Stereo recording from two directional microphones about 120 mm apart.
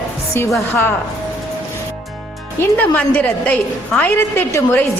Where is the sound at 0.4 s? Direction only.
20° left (ahead or behind).